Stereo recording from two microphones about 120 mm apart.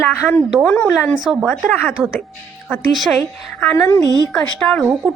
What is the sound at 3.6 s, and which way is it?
A woman's voice, 10° left (ahead or behind).